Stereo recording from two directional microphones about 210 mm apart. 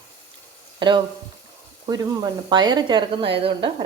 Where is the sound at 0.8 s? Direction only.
20° right (ahead or behind).